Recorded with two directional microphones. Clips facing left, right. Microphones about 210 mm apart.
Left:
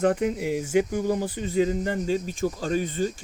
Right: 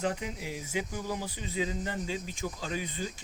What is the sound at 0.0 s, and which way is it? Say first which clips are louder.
Speech: left 11 dB; 50° left (ahead or behind).